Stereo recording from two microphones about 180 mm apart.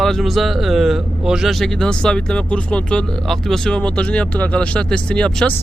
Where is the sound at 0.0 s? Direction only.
Centre (ahead or behind).